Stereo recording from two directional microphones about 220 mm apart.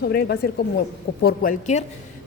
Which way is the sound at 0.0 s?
45° left (ahead or behind).